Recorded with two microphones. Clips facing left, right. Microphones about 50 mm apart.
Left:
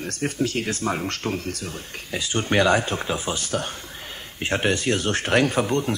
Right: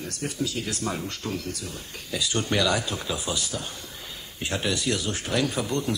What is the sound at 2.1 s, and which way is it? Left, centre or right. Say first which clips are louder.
Speech: left 3 dB; left.